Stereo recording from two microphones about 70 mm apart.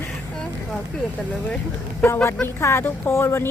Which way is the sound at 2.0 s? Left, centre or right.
Left.